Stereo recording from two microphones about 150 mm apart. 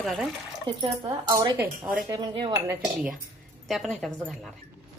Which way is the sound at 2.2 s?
35° right (ahead or behind).